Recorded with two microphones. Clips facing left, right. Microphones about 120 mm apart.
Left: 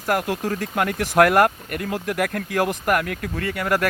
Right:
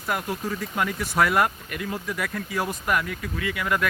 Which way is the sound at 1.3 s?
55° left (ahead or behind).